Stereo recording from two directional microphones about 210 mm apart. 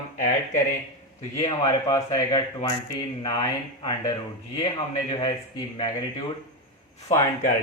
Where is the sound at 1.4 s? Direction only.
15° left (ahead or behind).